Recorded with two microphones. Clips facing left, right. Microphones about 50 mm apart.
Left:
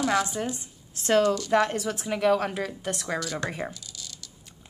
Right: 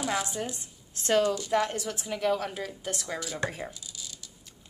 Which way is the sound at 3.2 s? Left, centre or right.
Centre.